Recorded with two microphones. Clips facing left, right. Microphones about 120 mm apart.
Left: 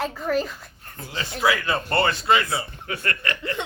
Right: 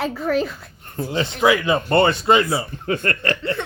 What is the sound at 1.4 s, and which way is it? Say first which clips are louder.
Speech: right 5 dB; 20° right (ahead or behind).